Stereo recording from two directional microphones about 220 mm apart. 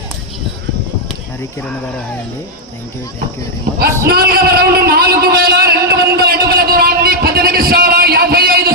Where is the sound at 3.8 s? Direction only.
45° right (ahead or behind).